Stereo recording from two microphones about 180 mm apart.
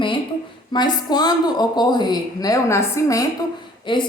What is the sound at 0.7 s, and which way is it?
A woman's voice, 25° left (ahead or behind).